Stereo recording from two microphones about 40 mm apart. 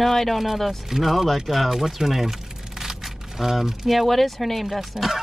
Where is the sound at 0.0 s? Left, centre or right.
Centre.